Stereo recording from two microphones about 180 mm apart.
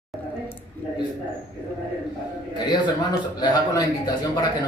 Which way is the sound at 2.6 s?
25° left (ahead or behind).